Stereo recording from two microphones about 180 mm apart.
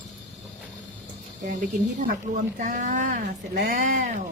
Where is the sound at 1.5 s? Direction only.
45° right (ahead or behind).